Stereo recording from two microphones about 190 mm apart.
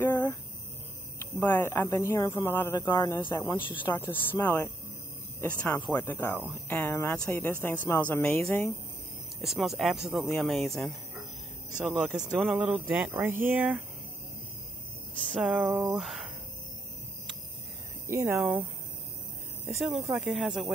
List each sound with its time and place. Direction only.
0.0 s a sound: 10° left (ahead or behind)
1.4 s speech: 10° left (ahead or behind)
4.1 s speech: 10° left (ahead or behind); by 13.8 s 10° right (ahead or behind)
15.3 s speech: 5° right (ahead or behind)
18.0 s speech: 15° right (ahead or behind)
18.4 s speech: 5° right (ahead or behind)